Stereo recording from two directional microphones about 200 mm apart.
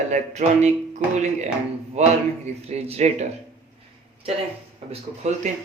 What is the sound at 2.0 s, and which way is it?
Speech, 35° right (ahead or behind).